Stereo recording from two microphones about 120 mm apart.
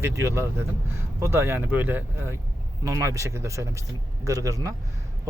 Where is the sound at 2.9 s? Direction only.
25° right (ahead or behind).